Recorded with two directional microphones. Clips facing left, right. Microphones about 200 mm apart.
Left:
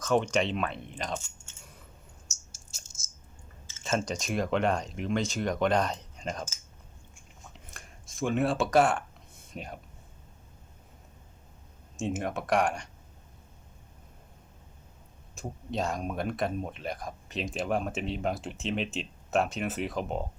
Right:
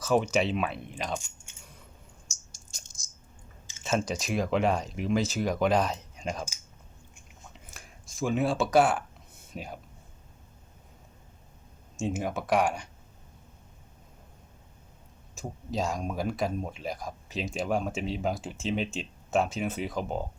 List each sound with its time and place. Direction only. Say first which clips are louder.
0.0 s speech: right 1 dB; 5° right (ahead or behind)
2.5 s a sound: even; 5° left (ahead or behind)
3.8 s speech: right 1 dB; centre (ahead or behind)
7.7 s speech: even; centre (ahead or behind)
11.9 s speech: right 1 dB; centre (ahead or behind)
15.4 s speech: right 1 dB; centre (ahead or behind)